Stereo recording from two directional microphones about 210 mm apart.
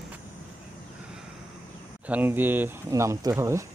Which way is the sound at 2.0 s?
10° right (ahead or behind).